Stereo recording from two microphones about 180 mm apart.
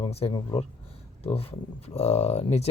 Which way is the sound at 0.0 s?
35° left (ahead or behind).